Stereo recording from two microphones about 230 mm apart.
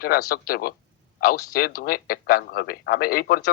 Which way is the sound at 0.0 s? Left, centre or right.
Left.